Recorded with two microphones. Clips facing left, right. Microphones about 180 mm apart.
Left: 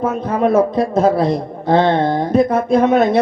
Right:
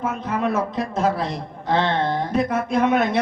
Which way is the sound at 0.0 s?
35° left (ahead or behind).